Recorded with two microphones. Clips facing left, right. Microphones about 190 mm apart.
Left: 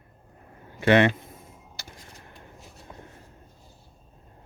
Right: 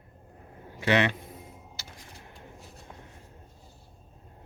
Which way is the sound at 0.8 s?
55° left (ahead or behind).